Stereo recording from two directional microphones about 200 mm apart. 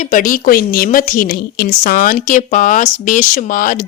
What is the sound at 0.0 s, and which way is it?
A woman's voice, 40° left (ahead or behind).